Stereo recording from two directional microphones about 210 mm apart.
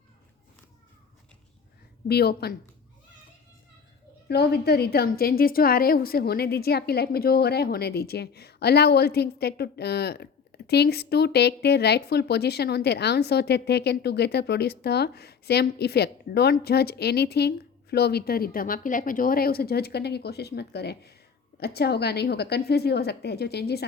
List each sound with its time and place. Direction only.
2.0 s speech: 50° left (ahead or behind)
4.3 s speech: 50° left (ahead or behind)